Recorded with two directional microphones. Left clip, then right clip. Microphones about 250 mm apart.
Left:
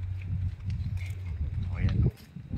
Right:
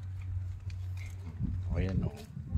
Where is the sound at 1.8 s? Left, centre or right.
Right.